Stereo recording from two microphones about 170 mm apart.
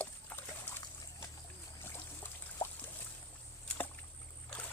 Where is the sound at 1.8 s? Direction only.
15° left (ahead or behind).